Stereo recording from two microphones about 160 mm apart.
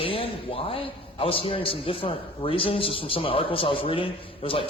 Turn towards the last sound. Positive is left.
turn(degrees=35)  # may be behind; listen again after turning